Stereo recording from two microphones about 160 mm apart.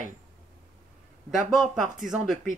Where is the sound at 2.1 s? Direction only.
Centre (ahead or behind).